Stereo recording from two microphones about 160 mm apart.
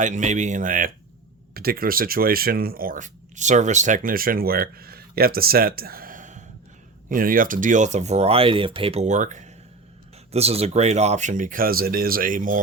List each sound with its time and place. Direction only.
0.0 s speech: 50° right (ahead or behind)
1.5 s speech: 70° right (ahead or behind); by 9.5 s 50° right (ahead or behind)
10.3 s speech: 40° right (ahead or behind); by 12.5 s 55° right (ahead or behind)